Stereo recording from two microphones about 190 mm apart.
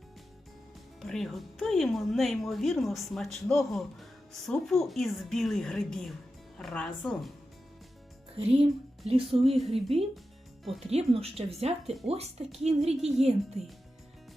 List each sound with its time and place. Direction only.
1.0 s speech: centre (ahead or behind)
8.4 s speech: 30° right (ahead or behind)
10.6 s speech: centre (ahead or behind)
10.9 s speech: 30° right (ahead or behind)
13.0 s speech: centre (ahead or behind)